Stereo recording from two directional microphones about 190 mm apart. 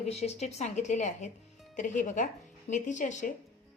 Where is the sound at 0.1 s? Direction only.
35° left (ahead or behind).